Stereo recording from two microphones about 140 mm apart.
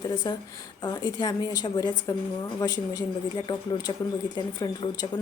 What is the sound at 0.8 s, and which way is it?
Speech, 30° left (ahead or behind).